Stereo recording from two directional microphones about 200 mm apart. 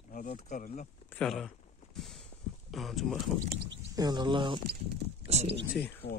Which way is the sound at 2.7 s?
Centre (ahead or behind).